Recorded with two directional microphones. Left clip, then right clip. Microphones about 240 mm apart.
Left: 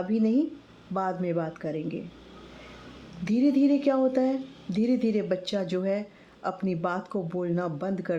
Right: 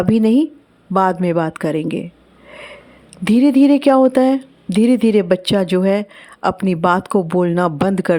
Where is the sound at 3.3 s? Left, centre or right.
Right.